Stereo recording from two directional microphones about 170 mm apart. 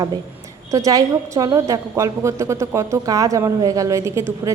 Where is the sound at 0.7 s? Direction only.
20° right (ahead or behind).